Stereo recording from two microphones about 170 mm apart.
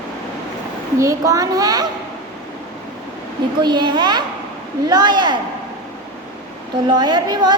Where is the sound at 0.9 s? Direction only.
20° right (ahead or behind).